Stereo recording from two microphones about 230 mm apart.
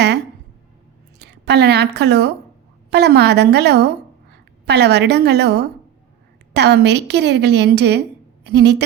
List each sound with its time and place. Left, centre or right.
1.2 s a woman's voice: right